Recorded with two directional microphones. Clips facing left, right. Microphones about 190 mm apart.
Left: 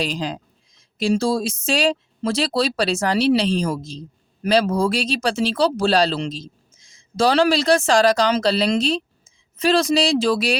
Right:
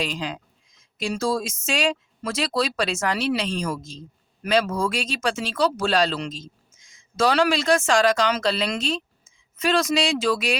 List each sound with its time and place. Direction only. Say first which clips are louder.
0.0 s speech: left 3 dB; 35° left (ahead or behind)